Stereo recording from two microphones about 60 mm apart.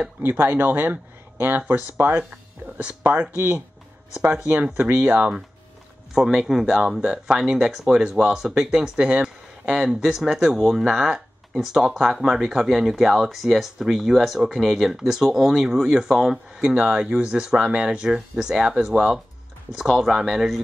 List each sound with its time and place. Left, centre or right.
0.2 s speech: right
4.7 s speech: right
5.0 s speech: right
6.1 s speech: centre
16.6 s speech: right; by 20.6 s centre